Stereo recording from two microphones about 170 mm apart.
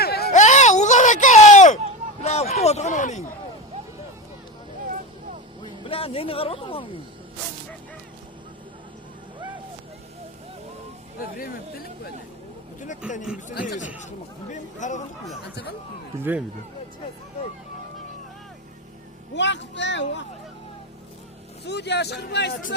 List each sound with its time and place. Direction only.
0.0 s a sound: 70° left (ahead or behind)
0.3 s a sound: 45° left (ahead or behind)
2.2 s speech: 40° left (ahead or behind)
5.8 s speech: 35° left (ahead or behind)
13.0 s speech: 5° right (ahead or behind)
13.5 s speech: 70° left (ahead or behind)
14.5 s speech: 45° left (ahead or behind)
19.3 s speech: 90° left
21.7 s a man's voice: 80° left